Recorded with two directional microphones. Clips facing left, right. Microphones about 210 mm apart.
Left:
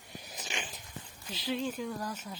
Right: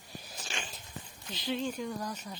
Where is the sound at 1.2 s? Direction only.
5° left (ahead or behind).